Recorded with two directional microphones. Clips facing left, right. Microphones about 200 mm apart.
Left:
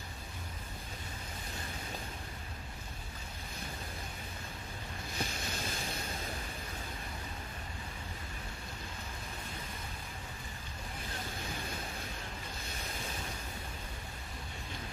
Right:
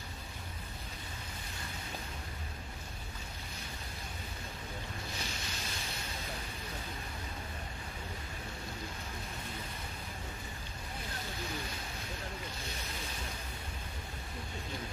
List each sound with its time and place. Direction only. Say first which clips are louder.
5.1 s boat: left 3 dB; 55° left (ahead or behind)